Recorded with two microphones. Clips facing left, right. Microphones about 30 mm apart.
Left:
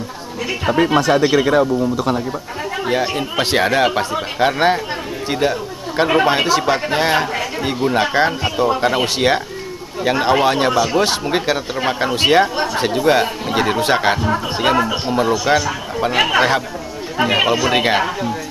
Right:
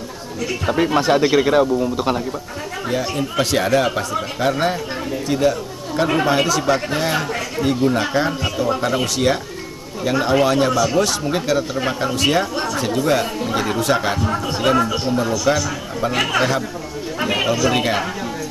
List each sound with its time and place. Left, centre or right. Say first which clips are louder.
1.1 s a man's voice: right 1 dB; centre
2.9 s speech: left 2 dB; left
7.3 s a man's voice: even; centre
7.9 s speech: left 3 dB; left
14.2 s speech: left 2 dB; left